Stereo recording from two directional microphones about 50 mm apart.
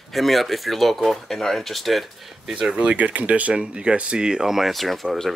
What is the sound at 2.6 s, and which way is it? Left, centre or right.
Speech, right.